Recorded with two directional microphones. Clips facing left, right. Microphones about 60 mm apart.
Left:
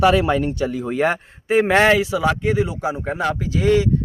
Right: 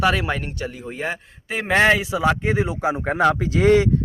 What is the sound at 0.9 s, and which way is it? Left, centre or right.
Speech, left.